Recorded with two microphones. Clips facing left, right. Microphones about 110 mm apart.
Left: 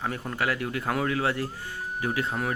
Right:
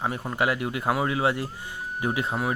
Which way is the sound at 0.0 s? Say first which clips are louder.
Right 3 dB; 20° right (ahead or behind).